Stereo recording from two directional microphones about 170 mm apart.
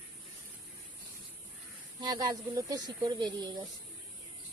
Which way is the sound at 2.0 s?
25° right (ahead or behind).